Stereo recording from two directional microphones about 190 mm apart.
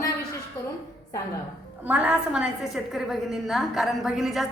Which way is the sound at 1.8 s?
5° right (ahead or behind).